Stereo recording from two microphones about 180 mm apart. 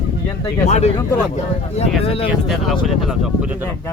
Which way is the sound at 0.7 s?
35° left (ahead or behind).